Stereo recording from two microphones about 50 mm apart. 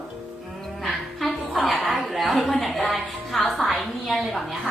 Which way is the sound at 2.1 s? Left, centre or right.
Centre.